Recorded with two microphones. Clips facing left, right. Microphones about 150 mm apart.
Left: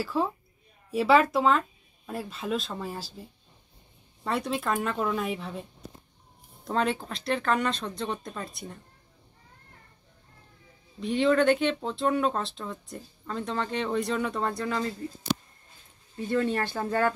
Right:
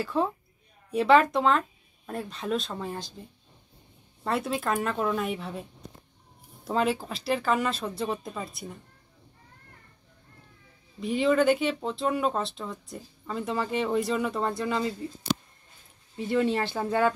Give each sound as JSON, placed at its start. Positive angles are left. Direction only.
{"t": 0.0, "sound": "speech", "side_deg": 0}
{"t": 11.0, "sound": "speech", "side_deg": 0}
{"t": 14.6, "sound": "speech", "side_deg": -15}
{"t": 16.3, "sound": "speech", "side_deg": -20}
{"t": 16.7, "sound": "speech", "side_deg": -5}